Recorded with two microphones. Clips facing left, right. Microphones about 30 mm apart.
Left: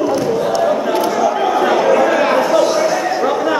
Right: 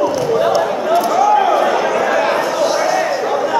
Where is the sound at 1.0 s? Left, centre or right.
Centre.